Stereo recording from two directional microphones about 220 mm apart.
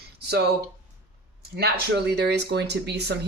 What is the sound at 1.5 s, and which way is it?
A woman's voice, 45° right (ahead or behind).